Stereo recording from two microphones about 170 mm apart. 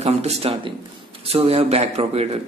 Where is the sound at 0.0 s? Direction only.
35° right (ahead or behind).